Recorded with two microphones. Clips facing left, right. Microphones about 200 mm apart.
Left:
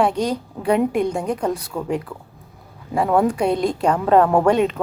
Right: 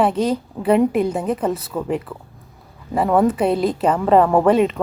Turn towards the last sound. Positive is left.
turn(degrees=0)  # may be behind; listen again after turning